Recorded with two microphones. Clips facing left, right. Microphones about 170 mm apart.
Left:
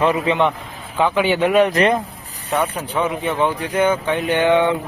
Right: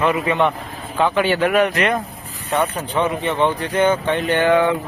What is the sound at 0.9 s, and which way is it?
Speech, 15° left (ahead or behind).